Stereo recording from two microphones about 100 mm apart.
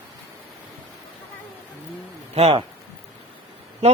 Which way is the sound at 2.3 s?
90° right.